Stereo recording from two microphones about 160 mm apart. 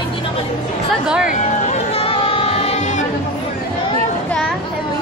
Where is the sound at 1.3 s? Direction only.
45° left (ahead or behind).